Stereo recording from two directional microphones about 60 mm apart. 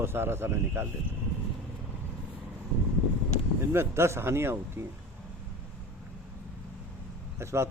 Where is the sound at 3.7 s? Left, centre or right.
Right.